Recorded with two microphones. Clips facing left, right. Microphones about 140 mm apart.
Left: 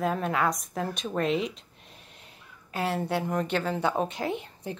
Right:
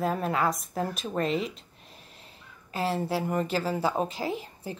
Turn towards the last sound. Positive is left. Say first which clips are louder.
# left 1 dB
turn(degrees=0)  # may be behind; listen again after turning